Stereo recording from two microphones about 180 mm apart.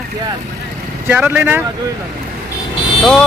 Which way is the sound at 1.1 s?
10° right (ahead or behind).